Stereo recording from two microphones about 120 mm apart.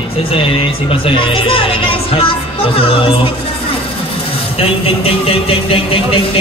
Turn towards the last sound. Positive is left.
turn(degrees=50)  # may be behind; listen again after turning